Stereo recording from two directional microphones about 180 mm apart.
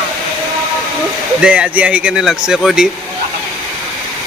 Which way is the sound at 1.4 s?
5° right (ahead or behind).